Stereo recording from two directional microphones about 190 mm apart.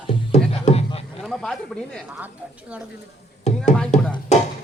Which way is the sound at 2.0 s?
10° right (ahead or behind).